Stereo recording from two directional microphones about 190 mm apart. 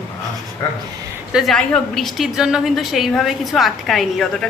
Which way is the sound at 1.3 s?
Centre (ahead or behind).